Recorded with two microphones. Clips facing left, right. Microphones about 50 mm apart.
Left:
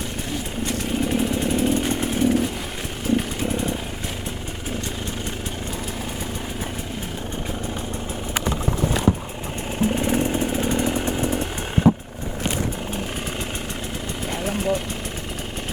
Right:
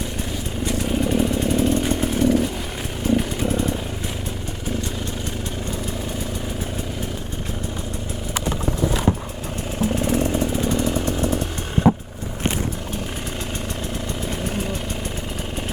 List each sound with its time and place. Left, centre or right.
0.6 s motorcycle: centre
3.1 s vehicle: centre
9.9 s vehicle: left
10.3 s chainsaw: left
11.9 s vehicle: right